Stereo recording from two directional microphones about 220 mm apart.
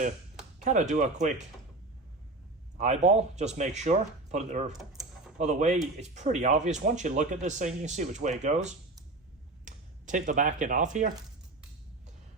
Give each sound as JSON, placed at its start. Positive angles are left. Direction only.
{"t": 0.6, "sound": "speech", "side_deg": -35}
{"t": 2.7, "sound": "speech", "side_deg": -30}
{"t": 9.6, "sound": "speech", "side_deg": -35}